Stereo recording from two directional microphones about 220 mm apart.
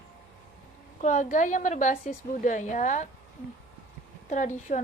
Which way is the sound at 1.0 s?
35° left (ahead or behind).